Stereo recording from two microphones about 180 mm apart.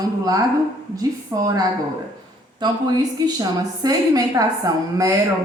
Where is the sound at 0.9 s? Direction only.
20° right (ahead or behind).